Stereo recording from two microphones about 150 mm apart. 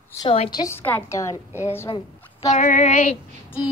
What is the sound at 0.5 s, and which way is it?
Speech, 20° left (ahead or behind).